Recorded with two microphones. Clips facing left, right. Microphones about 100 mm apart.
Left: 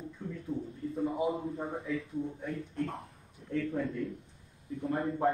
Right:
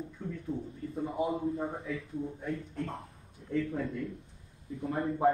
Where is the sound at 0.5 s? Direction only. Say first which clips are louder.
Left 1 dB; 25° right (ahead or behind).